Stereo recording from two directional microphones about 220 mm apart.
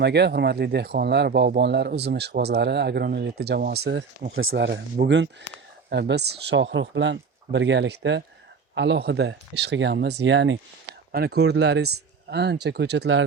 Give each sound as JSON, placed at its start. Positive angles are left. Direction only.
{"t": 0.0, "sound": "speech", "side_deg": -50}